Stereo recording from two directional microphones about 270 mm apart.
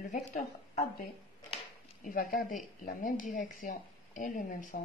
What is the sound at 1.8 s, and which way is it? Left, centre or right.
Speech, left.